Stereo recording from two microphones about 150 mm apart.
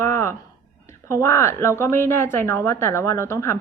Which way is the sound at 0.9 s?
20° left (ahead or behind).